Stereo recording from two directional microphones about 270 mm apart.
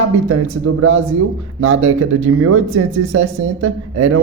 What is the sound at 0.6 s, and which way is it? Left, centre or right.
Speech, right.